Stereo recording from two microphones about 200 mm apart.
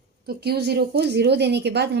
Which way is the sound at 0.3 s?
55° right (ahead or behind).